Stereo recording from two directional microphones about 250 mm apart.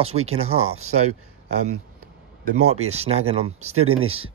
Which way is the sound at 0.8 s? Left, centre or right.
Right.